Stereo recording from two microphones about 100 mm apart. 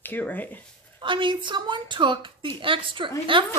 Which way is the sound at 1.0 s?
55° right (ahead or behind).